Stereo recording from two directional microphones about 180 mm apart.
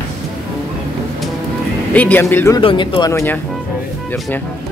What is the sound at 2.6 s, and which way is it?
Speech, 30° left (ahead or behind).